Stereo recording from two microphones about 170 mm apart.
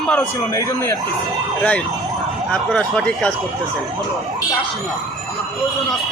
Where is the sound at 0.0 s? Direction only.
5° left (ahead or behind).